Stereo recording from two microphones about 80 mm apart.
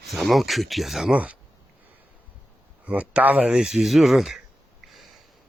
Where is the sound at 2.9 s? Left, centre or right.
Centre.